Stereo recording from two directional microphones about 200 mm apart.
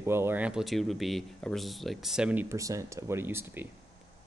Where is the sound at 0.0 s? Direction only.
10° right (ahead or behind).